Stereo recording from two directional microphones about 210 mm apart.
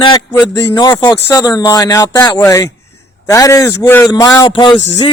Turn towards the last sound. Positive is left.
turn(degrees=25)  # may be behind; listen again after turning